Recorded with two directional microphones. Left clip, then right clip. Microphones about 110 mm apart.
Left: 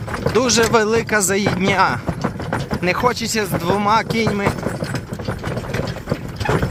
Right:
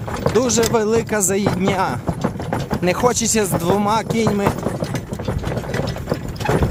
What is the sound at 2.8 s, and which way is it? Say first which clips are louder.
Speech: right 1 dB; 35° right (ahead or behind).